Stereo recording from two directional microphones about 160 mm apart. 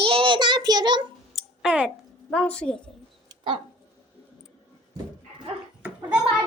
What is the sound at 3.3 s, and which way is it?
Dog, 30° right (ahead or behind).